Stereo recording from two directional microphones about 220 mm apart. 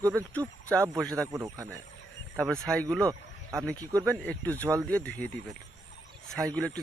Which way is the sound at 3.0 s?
10° right (ahead or behind).